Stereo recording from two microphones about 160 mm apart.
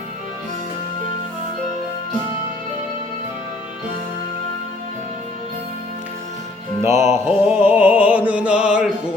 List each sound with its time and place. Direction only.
6.8 s music: 15° right (ahead or behind)